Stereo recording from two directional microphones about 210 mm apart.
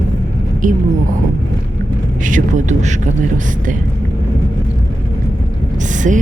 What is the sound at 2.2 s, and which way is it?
Speech, 40° right (ahead or behind).